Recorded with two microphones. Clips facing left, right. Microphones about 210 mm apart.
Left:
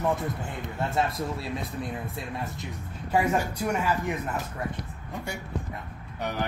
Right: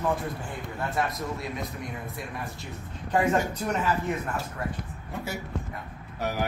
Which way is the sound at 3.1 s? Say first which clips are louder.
Right 1 dB; 10° left (ahead or behind).